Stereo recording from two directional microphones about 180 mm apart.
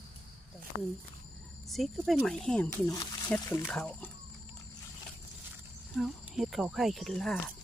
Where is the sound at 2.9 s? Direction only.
20° left (ahead or behind); by 4.1 s 5° left (ahead or behind).